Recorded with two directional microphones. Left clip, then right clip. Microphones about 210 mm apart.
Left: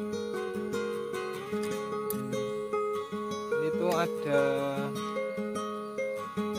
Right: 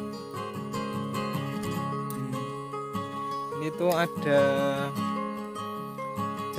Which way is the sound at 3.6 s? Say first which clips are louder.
Right 4 dB; 40° right (ahead or behind).